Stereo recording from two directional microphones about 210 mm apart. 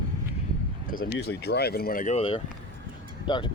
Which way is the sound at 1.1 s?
50° left (ahead or behind).